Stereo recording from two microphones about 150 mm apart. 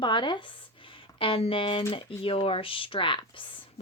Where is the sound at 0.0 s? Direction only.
30° left (ahead or behind).